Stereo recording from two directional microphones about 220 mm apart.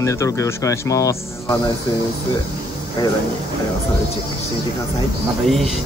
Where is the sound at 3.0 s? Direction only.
20° left (ahead or behind).